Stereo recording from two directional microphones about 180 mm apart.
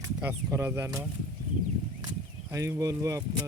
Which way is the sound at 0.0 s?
15° right (ahead or behind).